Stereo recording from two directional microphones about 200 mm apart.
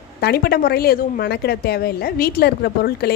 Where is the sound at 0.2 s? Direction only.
55° left (ahead or behind).